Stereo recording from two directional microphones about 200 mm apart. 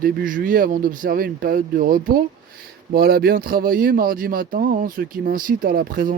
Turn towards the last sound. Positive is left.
turn(degrees=-45)  # may be behind; listen again after turning